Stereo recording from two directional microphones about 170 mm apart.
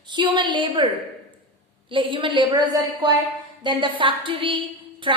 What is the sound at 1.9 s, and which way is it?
A woman's voice, 30° right (ahead or behind).